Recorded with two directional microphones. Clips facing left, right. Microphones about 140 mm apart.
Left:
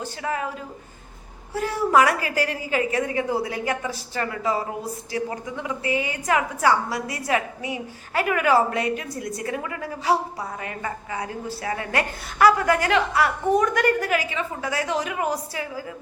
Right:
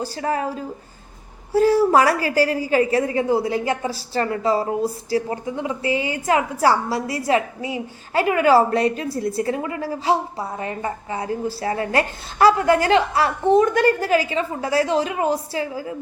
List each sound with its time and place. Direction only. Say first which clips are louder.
0.0 s a woman's voice: right 4 dB; 35° right (ahead or behind)